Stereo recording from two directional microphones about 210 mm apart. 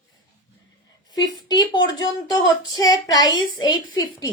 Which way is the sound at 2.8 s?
20° left (ahead or behind).